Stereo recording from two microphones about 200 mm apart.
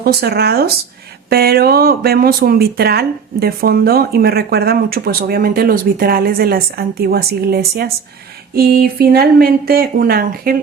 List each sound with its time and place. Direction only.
0.0 s speech: 50° right (ahead or behind)